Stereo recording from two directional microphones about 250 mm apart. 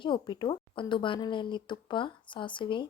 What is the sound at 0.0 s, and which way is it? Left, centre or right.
A woman's voice, centre.